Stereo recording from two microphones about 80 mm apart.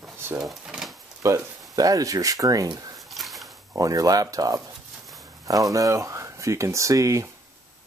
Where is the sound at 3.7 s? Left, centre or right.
Right.